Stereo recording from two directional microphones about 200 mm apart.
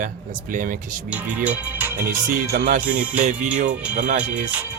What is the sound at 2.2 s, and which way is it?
Speech, 45° right (ahead or behind).